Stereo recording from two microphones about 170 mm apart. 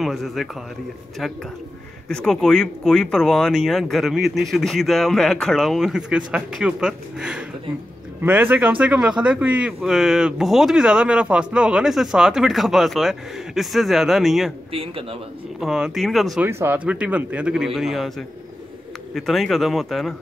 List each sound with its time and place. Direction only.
0.0 s speech: centre (ahead or behind)
2.0 s speech: 5° left (ahead or behind)
14.7 s a man's voice: 35° right (ahead or behind)
15.6 s speech: 5° right (ahead or behind)
16.4 s speech: 15° right (ahead or behind)
19.1 s speech: centre (ahead or behind)